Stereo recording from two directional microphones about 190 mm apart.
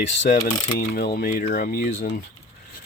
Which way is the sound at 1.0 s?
55° left (ahead or behind).